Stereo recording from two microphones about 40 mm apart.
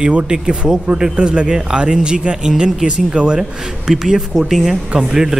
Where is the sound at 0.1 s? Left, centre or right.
Right.